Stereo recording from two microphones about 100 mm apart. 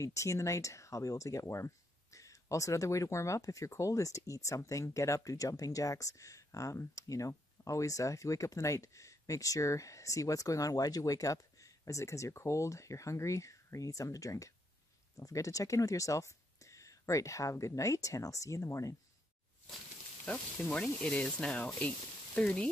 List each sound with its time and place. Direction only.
0.0 s speech: 30° left (ahead or behind)
20.6 s speech: 10° left (ahead or behind)